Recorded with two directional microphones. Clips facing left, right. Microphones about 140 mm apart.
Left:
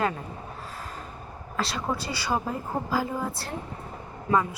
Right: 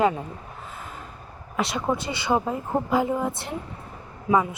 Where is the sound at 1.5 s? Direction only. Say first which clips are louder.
Right 4 dB; 20° right (ahead or behind).